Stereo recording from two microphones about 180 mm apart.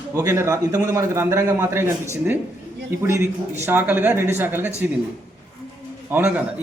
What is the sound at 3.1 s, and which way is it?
A man's voice, 15° right (ahead or behind).